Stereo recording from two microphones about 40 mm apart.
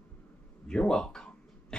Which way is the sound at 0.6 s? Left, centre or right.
Left.